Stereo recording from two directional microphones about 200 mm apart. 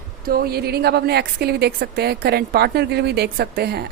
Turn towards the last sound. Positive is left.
turn(degrees=-55)  # may be behind; listen again after turning